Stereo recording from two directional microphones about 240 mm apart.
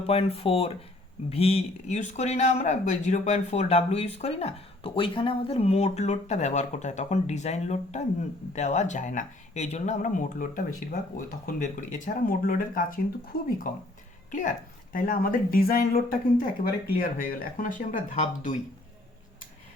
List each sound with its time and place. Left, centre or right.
0.1 s speech: left
14.3 s speech: left